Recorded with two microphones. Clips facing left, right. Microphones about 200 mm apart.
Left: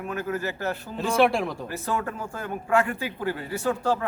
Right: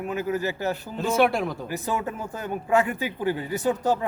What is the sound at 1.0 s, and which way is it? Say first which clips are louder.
Speech: even; centre (ahead or behind).